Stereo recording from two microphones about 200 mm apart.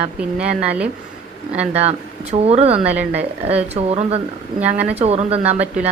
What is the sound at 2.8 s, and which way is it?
Speech, 5° right (ahead or behind).